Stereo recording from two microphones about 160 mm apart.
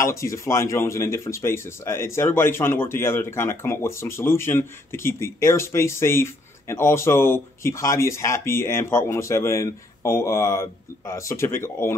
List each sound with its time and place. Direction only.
0.0 s speech: 20° left (ahead or behind)